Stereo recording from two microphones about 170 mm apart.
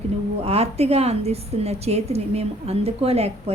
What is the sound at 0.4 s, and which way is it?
A woman's voice, 35° right (ahead or behind).